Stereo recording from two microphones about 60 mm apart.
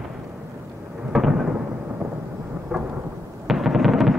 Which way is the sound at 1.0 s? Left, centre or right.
Centre.